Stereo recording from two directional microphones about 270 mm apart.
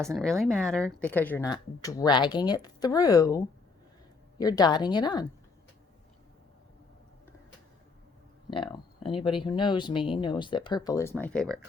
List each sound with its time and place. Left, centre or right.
0.0 s speech: centre
8.4 s speech: centre